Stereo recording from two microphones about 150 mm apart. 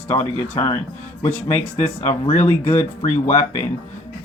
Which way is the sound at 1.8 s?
50° left (ahead or behind).